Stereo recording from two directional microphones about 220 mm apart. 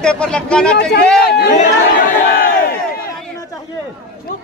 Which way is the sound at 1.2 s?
45° left (ahead or behind).